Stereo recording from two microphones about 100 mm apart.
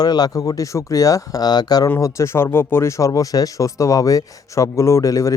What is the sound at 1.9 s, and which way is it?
Speech, 30° left (ahead or behind).